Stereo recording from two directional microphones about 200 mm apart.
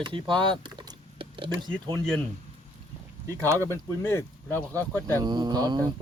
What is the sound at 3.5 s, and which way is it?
Speech, 15° left (ahead or behind).